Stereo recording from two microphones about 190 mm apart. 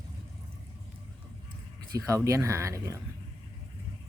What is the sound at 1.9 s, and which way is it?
Speech, 15° right (ahead or behind).